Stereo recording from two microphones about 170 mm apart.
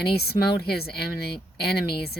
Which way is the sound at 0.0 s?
70° left (ahead or behind).